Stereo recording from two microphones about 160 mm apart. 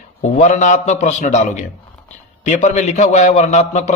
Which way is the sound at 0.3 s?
45° left (ahead or behind).